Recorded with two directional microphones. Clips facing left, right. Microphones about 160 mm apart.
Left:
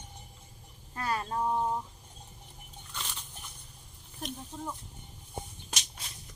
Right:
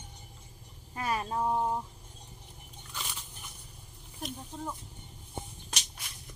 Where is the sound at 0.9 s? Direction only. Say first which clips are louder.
Right 1 dB; 15° right (ahead or behind).